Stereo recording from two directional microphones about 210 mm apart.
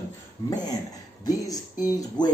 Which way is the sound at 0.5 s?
20° left (ahead or behind).